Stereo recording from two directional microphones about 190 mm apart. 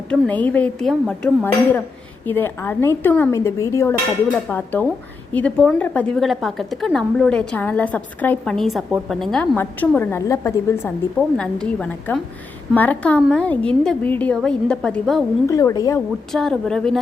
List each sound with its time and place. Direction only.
0.1 s a woman's voice: 10° left (ahead or behind)
15.4 s a woman's voice: 15° left (ahead or behind)
16.3 s a woman's voice: centre (ahead or behind)